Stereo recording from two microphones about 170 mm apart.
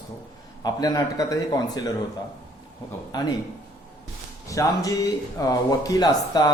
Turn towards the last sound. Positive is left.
turn(degrees=25)  # may be behind; listen again after turning